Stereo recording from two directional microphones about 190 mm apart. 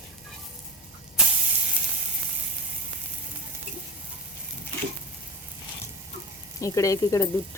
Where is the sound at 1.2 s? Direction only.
5° right (ahead or behind).